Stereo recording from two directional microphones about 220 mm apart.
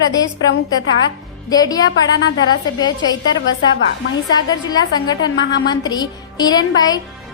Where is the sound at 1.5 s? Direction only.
15° left (ahead or behind).